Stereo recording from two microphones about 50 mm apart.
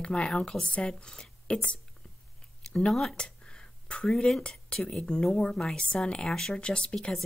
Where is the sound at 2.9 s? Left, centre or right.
Centre.